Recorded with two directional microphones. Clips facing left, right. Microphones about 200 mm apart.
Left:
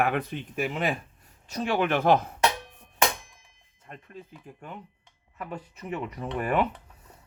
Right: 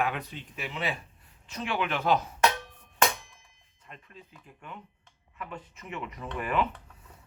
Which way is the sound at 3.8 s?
45° left (ahead or behind).